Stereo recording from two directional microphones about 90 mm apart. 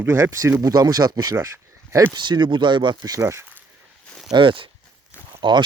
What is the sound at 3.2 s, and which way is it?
Speech, 30° right (ahead or behind).